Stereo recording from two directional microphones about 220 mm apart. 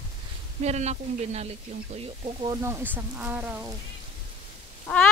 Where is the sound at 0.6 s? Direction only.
30° right (ahead or behind); by 3.7 s 10° right (ahead or behind).